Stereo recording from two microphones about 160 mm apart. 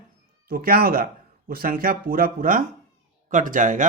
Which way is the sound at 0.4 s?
70° right (ahead or behind).